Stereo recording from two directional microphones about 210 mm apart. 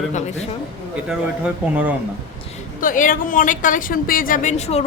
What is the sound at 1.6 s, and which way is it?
Speech, 5° right (ahead or behind).